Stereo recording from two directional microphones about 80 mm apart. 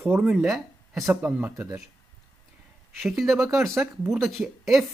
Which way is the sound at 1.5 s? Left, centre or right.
Right.